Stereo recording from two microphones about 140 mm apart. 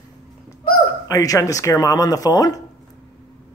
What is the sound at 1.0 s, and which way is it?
Speech, 25° left (ahead or behind).